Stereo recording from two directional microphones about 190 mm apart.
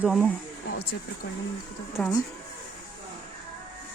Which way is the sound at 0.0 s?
5° right (ahead or behind).